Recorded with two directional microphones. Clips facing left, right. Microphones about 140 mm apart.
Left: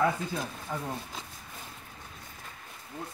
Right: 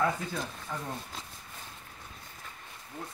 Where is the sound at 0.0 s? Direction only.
5° left (ahead or behind).